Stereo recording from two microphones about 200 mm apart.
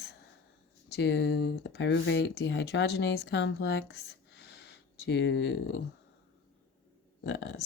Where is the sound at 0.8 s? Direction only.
55° left (ahead or behind).